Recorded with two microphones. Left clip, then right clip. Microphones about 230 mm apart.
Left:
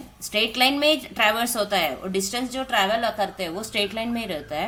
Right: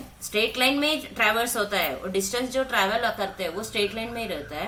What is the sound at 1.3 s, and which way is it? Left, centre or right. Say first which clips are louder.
A woman's voice: left 2 dB; left.